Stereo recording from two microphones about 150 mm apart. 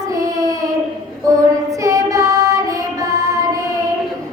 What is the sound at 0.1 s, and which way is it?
Child singing, 20° right (ahead or behind).